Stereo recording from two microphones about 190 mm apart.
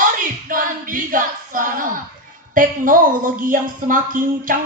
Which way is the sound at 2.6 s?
45° right (ahead or behind).